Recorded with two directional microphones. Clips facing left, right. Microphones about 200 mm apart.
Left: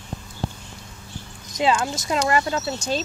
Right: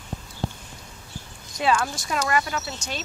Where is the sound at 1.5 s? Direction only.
20° left (ahead or behind).